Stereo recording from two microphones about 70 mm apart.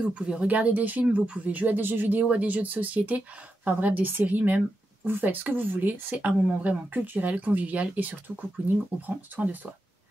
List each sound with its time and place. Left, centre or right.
0.1 s speech: centre